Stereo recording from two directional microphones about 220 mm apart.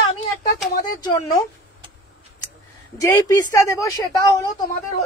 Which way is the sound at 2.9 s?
15° left (ahead or behind).